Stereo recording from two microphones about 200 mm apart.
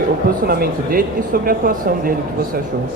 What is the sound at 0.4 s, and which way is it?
Speech, 50° right (ahead or behind).